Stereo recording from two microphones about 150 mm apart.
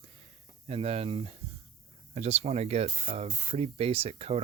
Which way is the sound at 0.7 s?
40° right (ahead or behind).